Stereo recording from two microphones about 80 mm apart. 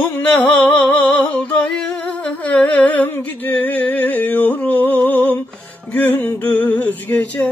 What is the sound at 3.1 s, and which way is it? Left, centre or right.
Music, left.